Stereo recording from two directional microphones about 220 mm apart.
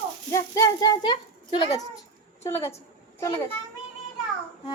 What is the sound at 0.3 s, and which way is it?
A child's voice, 15° left (ahead or behind).